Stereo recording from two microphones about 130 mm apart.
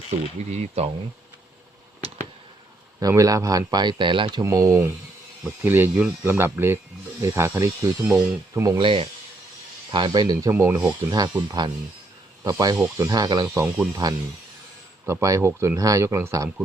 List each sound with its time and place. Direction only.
0.1 s speech: 55° right (ahead or behind)
3.0 s speech: 25° right (ahead or behind)
4.4 s speech: 25° right (ahead or behind)
5.6 s speech: 15° right (ahead or behind)
8.8 s speech: 40° right (ahead or behind)
10.5 s speech: 15° right (ahead or behind)
10.8 s speech: 30° right (ahead or behind)